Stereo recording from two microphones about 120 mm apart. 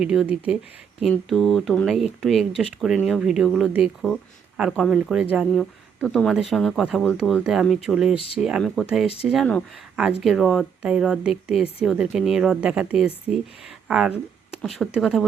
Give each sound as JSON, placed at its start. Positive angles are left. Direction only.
{"t": 0.0, "sound": "speech", "side_deg": -5}
{"t": 1.3, "sound": "speech", "side_deg": 5}
{"t": 5.5, "sound": "speech", "side_deg": 5}
{"t": 7.1, "sound": "speech", "side_deg": 10}
{"t": 7.4, "sound": "speech", "side_deg": 0}
{"t": 8.6, "sound": "speech", "side_deg": 5}